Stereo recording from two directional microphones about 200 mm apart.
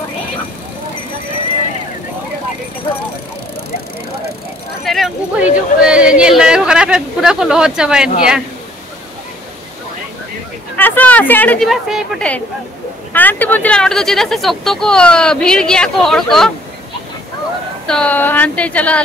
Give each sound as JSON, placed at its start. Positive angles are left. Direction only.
{"t": 4.8, "sound": "speech", "side_deg": 0}
{"t": 10.8, "sound": "a woman's voice", "side_deg": 10}
{"t": 17.8, "sound": "a woman's voice", "side_deg": 5}